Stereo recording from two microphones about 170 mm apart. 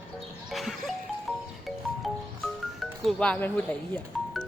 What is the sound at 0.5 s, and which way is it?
Music, centre (ahead or behind).